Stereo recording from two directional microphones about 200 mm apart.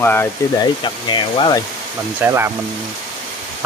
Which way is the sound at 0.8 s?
20° left (ahead or behind).